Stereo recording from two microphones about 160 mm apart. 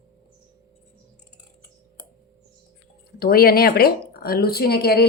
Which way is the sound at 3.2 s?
70° left (ahead or behind).